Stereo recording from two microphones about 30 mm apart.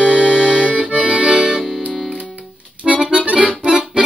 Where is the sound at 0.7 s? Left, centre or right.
Right.